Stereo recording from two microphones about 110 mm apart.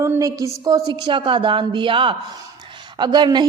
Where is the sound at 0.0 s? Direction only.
30° right (ahead or behind).